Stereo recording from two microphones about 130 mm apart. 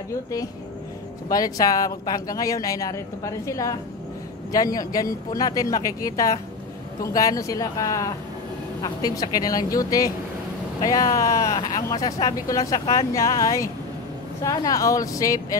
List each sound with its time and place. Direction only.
1.3 s speech: 30° left (ahead or behind)